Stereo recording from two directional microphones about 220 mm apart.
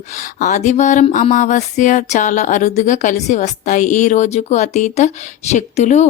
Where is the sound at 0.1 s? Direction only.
35° left (ahead or behind).